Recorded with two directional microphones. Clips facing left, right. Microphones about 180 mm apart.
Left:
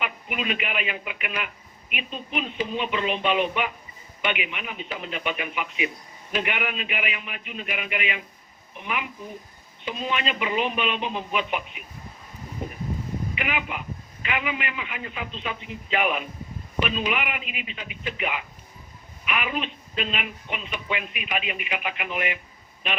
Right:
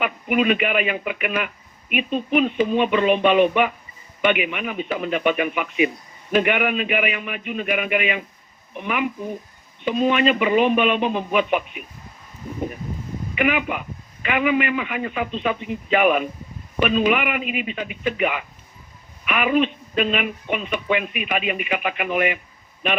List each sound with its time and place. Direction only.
0.0 s speech: 55° right (ahead or behind)
13.3 s speech: 55° right (ahead or behind)